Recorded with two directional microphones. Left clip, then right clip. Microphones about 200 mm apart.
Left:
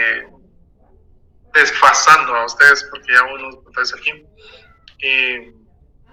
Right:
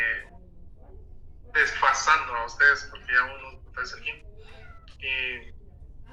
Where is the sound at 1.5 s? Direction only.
60° left (ahead or behind).